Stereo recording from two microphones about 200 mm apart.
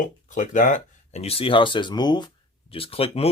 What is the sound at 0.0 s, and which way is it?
Speech, 40° left (ahead or behind).